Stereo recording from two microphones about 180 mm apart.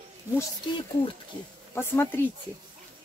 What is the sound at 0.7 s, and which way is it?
Speech, 25° left (ahead or behind).